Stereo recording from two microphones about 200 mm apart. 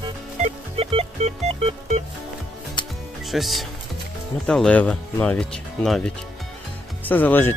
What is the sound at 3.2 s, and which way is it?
Speech, centre (ahead or behind).